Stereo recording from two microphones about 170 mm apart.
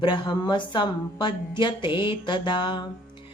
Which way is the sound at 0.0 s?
25° left (ahead or behind).